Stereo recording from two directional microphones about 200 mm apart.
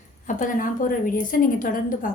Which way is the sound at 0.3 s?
40° left (ahead or behind).